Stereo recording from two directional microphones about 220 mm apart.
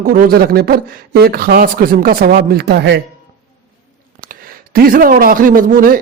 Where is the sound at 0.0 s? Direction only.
40° right (ahead or behind).